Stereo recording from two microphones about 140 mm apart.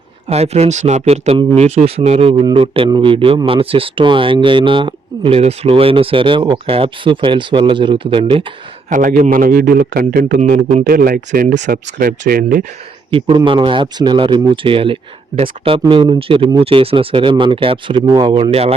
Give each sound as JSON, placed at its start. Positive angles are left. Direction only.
{"t": 0.3, "sound": "speech", "side_deg": -50}
{"t": 8.9, "sound": "a man's voice", "side_deg": -70}
{"t": 13.1, "sound": "speech", "side_deg": -40}